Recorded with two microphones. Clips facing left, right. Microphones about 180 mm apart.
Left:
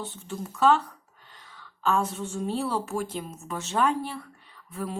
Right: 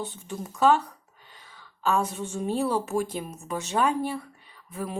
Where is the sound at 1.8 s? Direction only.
10° right (ahead or behind).